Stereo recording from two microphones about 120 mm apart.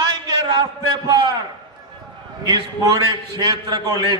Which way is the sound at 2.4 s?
35° right (ahead or behind).